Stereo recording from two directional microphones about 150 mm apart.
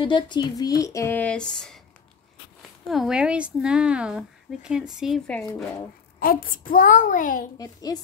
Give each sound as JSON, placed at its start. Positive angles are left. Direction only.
{"t": 0.0, "sound": "speech", "side_deg": 30}
{"t": 2.9, "sound": "speech", "side_deg": -5}
{"t": 6.1, "sound": "a child's voice", "side_deg": 70}
{"t": 7.5, "sound": "speech", "side_deg": 25}